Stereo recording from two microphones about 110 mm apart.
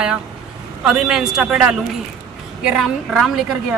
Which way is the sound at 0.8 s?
5° right (ahead or behind).